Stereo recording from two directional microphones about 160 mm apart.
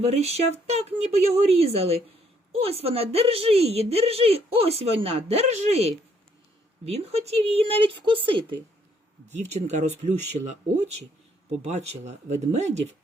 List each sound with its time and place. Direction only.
0.0 s a woman's voice: 40° right (ahead or behind)
9.3 s speech: 45° right (ahead or behind)
11.6 s speech: 45° right (ahead or behind)